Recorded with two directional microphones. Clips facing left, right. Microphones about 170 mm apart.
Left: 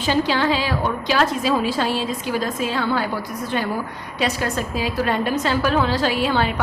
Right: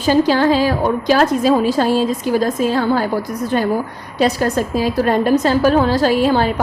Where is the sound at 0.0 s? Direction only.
40° right (ahead or behind).